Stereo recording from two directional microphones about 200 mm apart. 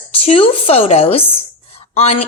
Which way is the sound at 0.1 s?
30° left (ahead or behind).